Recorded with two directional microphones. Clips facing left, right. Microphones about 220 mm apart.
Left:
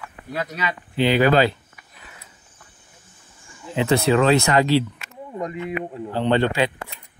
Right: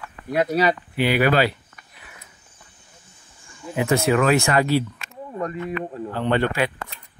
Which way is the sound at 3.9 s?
30° left (ahead or behind).